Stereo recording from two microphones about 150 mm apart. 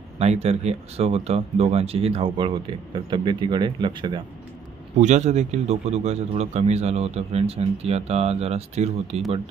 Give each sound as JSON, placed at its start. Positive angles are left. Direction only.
{"t": 0.2, "sound": "speech", "side_deg": -45}
{"t": 4.9, "sound": "speech", "side_deg": -50}